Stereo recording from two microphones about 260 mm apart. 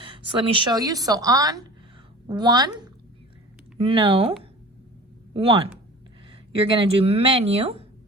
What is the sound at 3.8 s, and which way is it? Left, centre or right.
Speech, centre.